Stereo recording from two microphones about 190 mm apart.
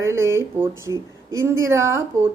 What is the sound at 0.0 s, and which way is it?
A woman's voice, 15° right (ahead or behind).